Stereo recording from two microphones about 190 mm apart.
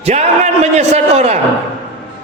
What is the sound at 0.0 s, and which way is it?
A man's voice, 35° right (ahead or behind).